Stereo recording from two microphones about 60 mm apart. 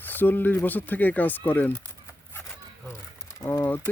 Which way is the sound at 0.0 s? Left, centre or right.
Left.